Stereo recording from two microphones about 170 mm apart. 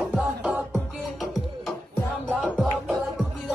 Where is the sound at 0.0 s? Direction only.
5° right (ahead or behind).